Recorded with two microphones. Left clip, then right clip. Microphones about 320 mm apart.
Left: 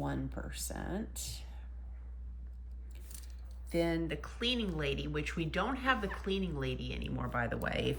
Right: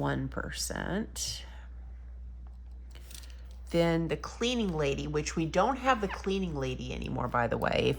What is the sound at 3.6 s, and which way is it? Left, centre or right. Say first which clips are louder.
Speech: right 5 dB; centre.